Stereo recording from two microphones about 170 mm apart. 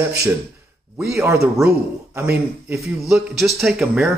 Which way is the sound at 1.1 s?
15° right (ahead or behind).